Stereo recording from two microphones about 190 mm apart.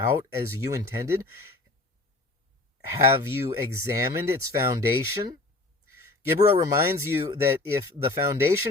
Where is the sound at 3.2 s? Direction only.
15° right (ahead or behind).